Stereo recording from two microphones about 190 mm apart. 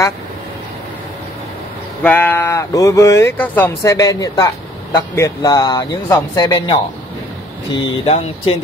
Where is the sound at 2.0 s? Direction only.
10° left (ahead or behind).